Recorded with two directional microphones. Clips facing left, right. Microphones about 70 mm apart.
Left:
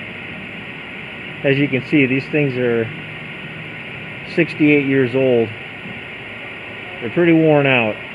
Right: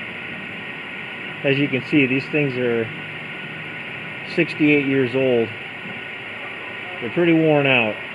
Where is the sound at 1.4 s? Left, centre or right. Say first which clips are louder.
Left 3 dB; left.